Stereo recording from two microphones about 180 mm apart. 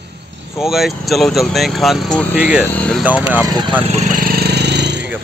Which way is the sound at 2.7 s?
5° left (ahead or behind).